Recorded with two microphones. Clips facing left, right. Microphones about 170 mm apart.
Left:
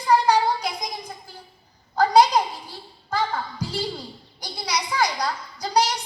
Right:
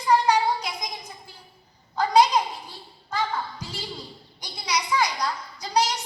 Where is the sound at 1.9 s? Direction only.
35° left (ahead or behind).